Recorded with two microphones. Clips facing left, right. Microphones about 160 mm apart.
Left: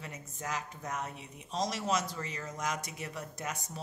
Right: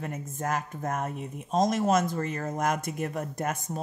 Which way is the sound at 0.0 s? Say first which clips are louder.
Right 9 dB; 50° right (ahead or behind).